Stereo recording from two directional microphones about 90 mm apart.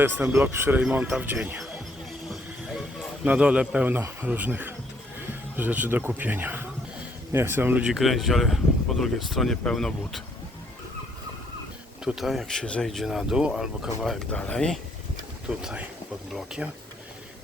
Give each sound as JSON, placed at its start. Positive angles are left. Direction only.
{"t": 0.0, "sound": "speech", "side_deg": -15}
{"t": 0.3, "sound": "speech", "side_deg": -25}
{"t": 2.3, "sound": "music", "side_deg": -5}
{"t": 3.2, "sound": "speech", "side_deg": -10}
{"t": 7.9, "sound": "speech", "side_deg": 0}
{"t": 12.0, "sound": "speech", "side_deg": 0}
{"t": 14.3, "sound": "speech", "side_deg": 15}
{"t": 15.4, "sound": "speech", "side_deg": -10}